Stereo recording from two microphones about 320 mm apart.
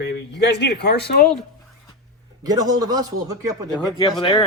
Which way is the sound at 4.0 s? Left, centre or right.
Centre.